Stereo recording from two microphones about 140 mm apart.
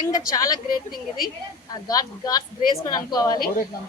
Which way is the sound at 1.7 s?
25° left (ahead or behind).